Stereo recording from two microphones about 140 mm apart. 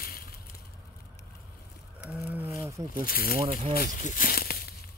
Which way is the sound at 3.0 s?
90° left.